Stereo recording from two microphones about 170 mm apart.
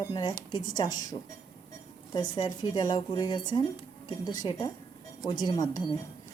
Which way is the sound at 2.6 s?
25° left (ahead or behind).